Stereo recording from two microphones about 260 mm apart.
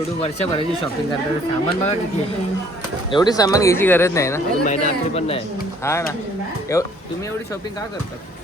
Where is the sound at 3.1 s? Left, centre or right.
Centre.